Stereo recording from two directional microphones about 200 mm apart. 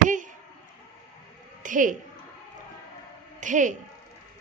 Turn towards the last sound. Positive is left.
turn(degrees=-40)  # may be behind; listen again after turning